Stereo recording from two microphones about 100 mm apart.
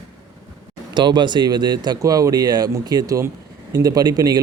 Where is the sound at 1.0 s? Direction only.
50° right (ahead or behind).